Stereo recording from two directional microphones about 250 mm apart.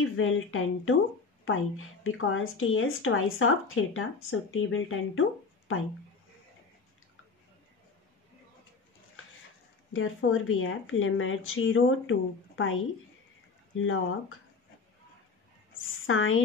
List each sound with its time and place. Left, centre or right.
0.0 s speech: left
9.9 s speech: left
13.7 s speech: left
16.1 s speech: left